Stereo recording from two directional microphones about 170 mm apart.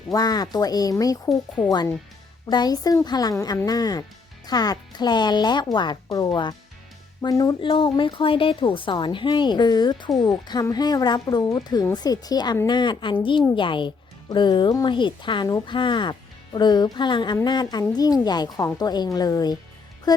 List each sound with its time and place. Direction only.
0.1 s speech: 20° left (ahead or behind)
2.5 s speech: 25° left (ahead or behind)